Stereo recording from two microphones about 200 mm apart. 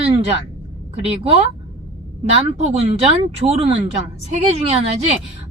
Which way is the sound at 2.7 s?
30° right (ahead or behind).